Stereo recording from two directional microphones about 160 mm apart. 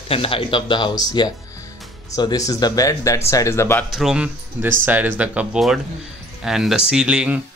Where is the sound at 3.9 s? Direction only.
5° right (ahead or behind).